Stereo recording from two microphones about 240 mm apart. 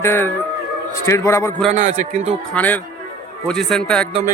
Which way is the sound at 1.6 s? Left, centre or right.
Right.